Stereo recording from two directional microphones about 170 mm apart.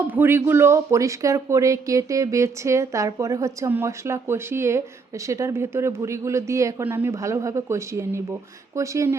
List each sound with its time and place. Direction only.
0.1 s speech: 10° right (ahead or behind)